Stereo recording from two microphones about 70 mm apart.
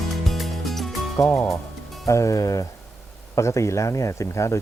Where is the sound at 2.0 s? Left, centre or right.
Left.